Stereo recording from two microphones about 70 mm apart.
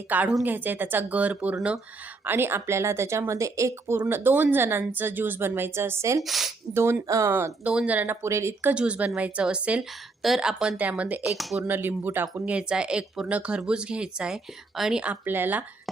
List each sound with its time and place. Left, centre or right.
0.1 s speech: right
2.2 s speech: right
4.0 s speech: right
6.2 s speech: centre
7.1 s speech: right
7.6 s a woman's voice: centre
7.9 s speech: right
8.7 s a woman's voice: centre
10.2 s speech: centre
10.8 s speech: centre
11.2 s speech: centre
11.7 s speech: right
12.5 s a woman's voice: centre
15.2 s speech: right